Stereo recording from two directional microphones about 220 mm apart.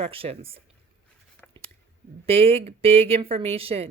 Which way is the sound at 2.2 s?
25° right (ahead or behind).